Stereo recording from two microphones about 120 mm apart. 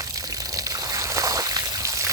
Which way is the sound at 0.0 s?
30° right (ahead or behind).